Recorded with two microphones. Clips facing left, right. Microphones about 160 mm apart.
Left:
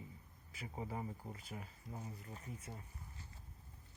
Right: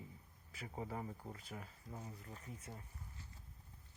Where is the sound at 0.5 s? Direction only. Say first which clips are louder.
Even; 10° left (ahead or behind).